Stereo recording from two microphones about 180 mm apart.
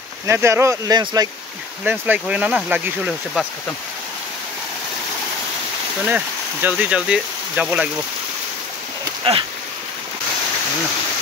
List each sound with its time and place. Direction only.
0.3 s speech: 15° right (ahead or behind)
1.9 s speech: 10° right (ahead or behind)
6.0 s speech: 10° right (ahead or behind)
9.3 s a sound: 30° right (ahead or behind)